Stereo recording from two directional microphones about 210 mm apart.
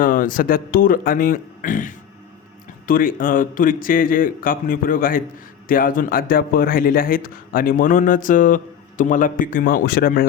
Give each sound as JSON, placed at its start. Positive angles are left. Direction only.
{"t": 0.0, "sound": "a man's voice", "side_deg": 40}